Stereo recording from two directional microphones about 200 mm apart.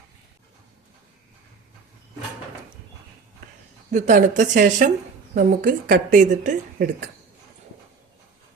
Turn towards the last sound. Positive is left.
turn(degrees=-40)  # may be behind; listen again after turning